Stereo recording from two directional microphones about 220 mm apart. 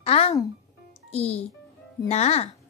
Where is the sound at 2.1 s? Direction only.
30° left (ahead or behind).